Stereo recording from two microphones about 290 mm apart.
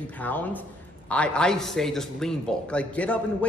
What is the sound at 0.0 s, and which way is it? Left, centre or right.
A man's voice, centre.